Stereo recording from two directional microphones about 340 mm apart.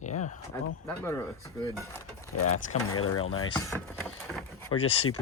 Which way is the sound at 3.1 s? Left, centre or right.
Left.